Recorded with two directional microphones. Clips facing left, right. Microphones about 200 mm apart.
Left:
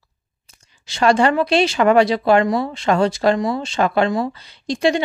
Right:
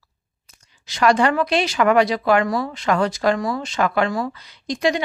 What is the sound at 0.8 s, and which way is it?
Speech, 25° left (ahead or behind).